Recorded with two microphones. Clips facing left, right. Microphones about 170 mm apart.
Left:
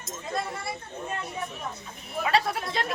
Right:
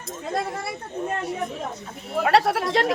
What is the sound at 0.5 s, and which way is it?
Speech, 75° right (ahead or behind).